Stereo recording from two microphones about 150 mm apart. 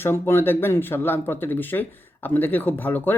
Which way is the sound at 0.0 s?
15° left (ahead or behind).